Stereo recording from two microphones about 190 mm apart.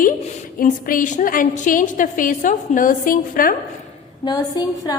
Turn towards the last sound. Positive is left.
turn(degrees=20)  # may be behind; listen again after turning